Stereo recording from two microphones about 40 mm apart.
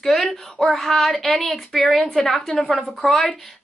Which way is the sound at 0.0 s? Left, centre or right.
Centre.